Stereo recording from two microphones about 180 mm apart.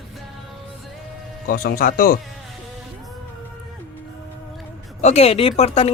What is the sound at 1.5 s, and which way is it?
Speech, 55° left (ahead or behind).